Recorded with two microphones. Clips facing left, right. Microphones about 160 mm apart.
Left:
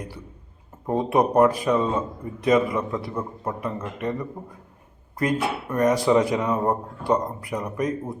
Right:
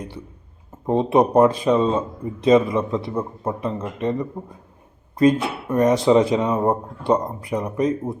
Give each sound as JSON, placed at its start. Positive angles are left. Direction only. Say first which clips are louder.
{"t": 0.9, "sound": "a man's voice", "louder": "right 4 dB", "side_deg": -25}